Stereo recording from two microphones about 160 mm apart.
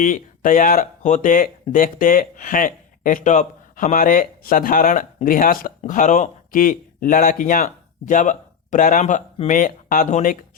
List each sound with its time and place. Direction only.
0.0 s speech: 60° left (ahead or behind)